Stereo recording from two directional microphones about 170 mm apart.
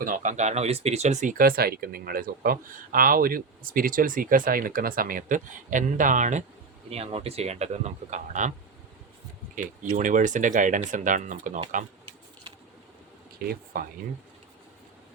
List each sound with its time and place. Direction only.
0.0 s speech: 50° right (ahead or behind)
6.9 s speech: 35° right (ahead or behind)
10.0 s speech: 50° right (ahead or behind)
13.4 s speech: 60° right (ahead or behind)